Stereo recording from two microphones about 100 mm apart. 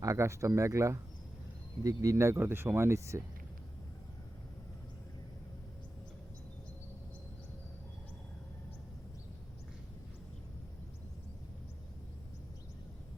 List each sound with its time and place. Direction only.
0.0 s speech: 30° right (ahead or behind)